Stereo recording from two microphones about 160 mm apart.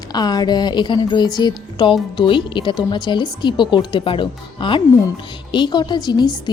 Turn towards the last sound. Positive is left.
turn(degrees=25)  # may be behind; listen again after turning